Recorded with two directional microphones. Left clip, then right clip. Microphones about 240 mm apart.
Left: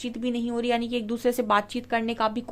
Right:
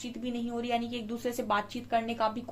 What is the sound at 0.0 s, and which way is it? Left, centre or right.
A woman's voice, left.